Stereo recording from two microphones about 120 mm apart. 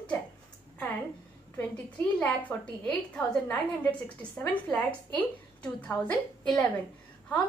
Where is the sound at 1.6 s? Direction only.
10° left (ahead or behind).